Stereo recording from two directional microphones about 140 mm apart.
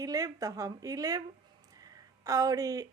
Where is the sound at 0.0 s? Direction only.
25° right (ahead or behind).